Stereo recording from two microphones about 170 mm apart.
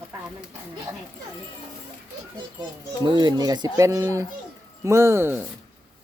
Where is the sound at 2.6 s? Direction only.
25° right (ahead or behind).